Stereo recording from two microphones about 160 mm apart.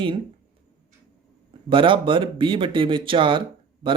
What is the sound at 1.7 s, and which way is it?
Speech, 30° right (ahead or behind).